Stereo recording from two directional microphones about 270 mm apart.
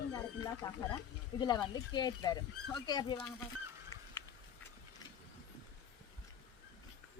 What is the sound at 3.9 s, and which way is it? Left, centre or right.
Dog, centre.